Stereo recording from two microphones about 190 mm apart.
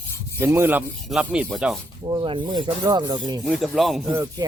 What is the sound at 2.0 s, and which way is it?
Speech, 25° right (ahead or behind).